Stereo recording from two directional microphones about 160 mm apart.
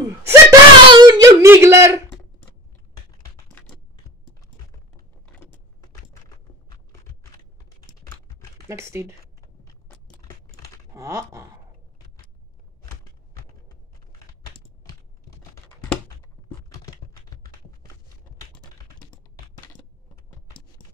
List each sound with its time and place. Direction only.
0.3 s whimper: 25° right (ahead or behind)
3.4 s typing: 5° left (ahead or behind)
5.2 s keys jangling: 10° left (ahead or behind)
8.6 s speech: 15° right (ahead or behind)
9.8 s a sound: 10° left (ahead or behind)
10.9 s a sound: 15° right (ahead or behind)
14.9 s computer keyboard: 20° left (ahead or behind)